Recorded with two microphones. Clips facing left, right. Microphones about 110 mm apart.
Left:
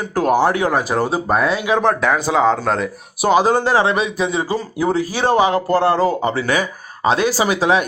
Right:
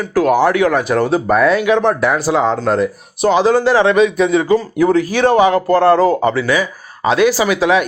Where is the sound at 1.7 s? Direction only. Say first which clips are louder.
Right 2 dB; centre (ahead or behind).